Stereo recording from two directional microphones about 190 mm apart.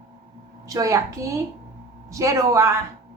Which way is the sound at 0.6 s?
15° right (ahead or behind).